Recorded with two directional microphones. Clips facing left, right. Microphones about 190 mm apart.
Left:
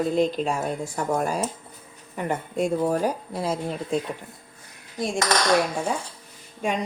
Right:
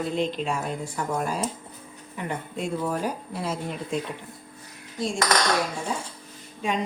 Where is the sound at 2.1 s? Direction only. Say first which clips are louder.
Left 5 dB; 45° left (ahead or behind).